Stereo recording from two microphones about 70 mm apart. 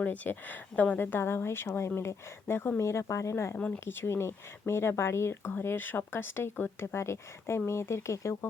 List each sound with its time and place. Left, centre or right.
0.0 s speech: left
2.8 s speech: left
3.5 s speech: left